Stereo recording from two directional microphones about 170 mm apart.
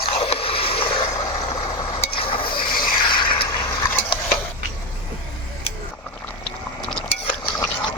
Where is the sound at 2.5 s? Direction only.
55° left (ahead or behind).